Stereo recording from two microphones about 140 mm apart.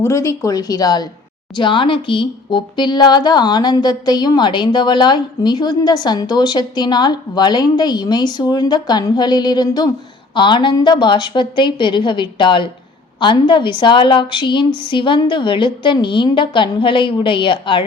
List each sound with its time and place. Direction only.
0.0 s speech: 20° left (ahead or behind)